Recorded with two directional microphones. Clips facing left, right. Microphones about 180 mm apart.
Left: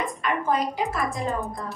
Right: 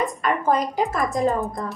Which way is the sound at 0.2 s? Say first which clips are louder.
Right 2 dB; 45° right (ahead or behind).